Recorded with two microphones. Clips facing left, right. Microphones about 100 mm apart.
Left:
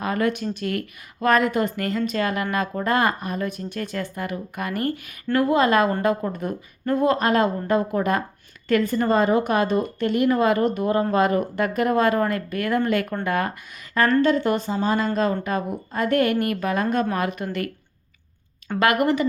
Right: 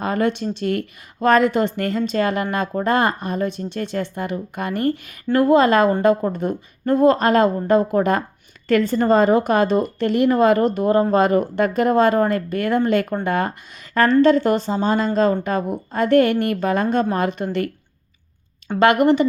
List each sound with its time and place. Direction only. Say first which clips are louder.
0.0 s a woman's voice: right 3 dB; 30° right (ahead or behind)
18.8 s a woman's voice: right 5 dB; 25° right (ahead or behind)